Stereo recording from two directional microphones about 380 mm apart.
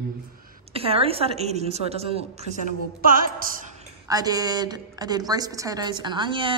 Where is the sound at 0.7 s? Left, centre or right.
Centre.